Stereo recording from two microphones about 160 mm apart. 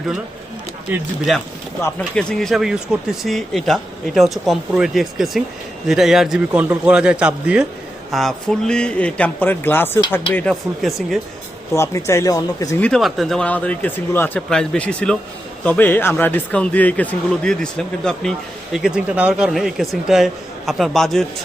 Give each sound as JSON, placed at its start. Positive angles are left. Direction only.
{"t": 0.9, "sound": "a man's voice", "side_deg": -10}
{"t": 1.8, "sound": "a man's voice", "side_deg": 5}
{"t": 11.7, "sound": "speech", "side_deg": 15}
{"t": 12.8, "sound": "speech", "side_deg": 0}